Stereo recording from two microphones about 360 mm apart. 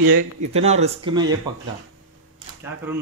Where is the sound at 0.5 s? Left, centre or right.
Centre.